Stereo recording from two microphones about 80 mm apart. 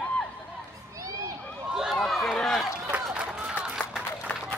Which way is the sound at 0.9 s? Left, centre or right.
Right.